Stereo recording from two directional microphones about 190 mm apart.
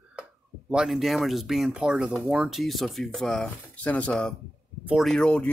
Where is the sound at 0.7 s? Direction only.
Centre (ahead or behind).